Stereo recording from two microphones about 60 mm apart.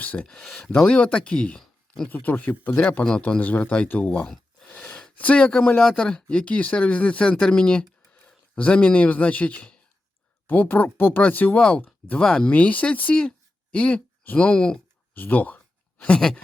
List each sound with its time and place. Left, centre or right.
0.2 s speech: centre
2.0 s speech: left
2.7 s speech: centre
3.8 s a sound: left
5.1 s speech: left
10.4 s speech: left
12.2 s speech: centre
12.5 s speech: left
15.1 s speech: left
16.0 s speech: centre